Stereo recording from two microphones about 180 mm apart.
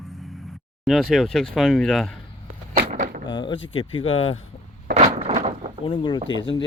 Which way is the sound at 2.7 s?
50° right (ahead or behind).